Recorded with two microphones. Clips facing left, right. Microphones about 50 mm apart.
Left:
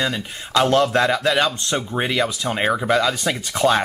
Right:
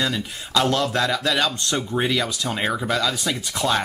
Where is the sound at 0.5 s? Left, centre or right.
Left.